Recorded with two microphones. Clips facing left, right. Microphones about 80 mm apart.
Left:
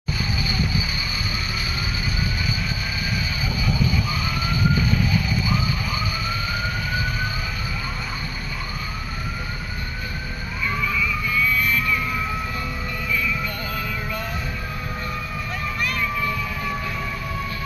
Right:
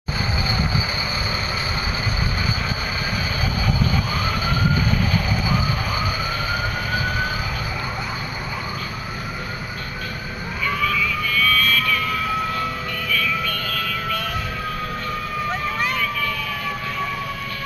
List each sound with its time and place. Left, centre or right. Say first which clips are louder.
10.8 s vehicle: right 2 dB; centre
13.1 s music: right 2 dB; left
16.0 s vehicle: even; left